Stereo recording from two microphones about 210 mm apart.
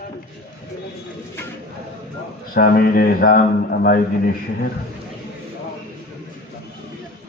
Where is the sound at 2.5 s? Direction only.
45° left (ahead or behind).